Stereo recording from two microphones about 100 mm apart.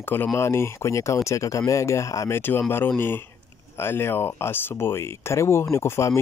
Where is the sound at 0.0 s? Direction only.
20° left (ahead or behind).